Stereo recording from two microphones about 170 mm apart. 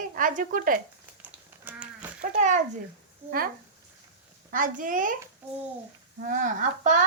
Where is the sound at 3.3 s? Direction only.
60° right (ahead or behind).